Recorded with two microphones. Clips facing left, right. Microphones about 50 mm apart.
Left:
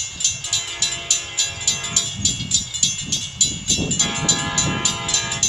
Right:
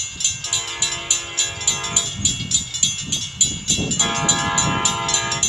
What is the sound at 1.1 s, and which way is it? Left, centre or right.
Train, centre.